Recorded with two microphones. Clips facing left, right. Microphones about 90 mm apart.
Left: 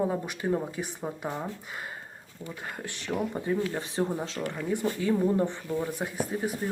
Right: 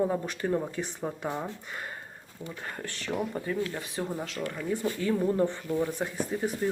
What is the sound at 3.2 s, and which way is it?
Speech, 20° left (ahead or behind).